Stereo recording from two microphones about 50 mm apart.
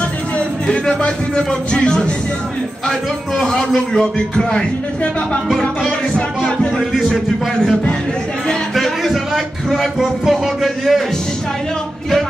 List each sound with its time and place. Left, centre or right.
0.7 s speech: centre
3.5 s speech: centre
5.6 s music: centre
6.8 s a man's voice: centre
8.7 s music: centre